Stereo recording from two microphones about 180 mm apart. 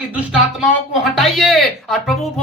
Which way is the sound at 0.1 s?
5° right (ahead or behind).